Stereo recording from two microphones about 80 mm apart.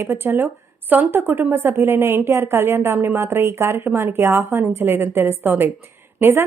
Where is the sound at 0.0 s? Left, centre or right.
Right.